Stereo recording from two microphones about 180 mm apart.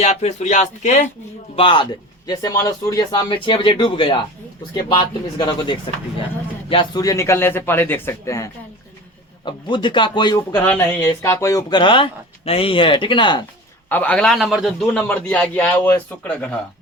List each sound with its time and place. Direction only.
0.0 s speech: 40° left (ahead or behind)
1.5 s speech: 30° left (ahead or behind)
13.9 s a man's voice: 5° left (ahead or behind)